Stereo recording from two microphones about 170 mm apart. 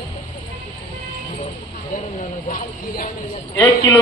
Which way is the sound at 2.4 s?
55° left (ahead or behind).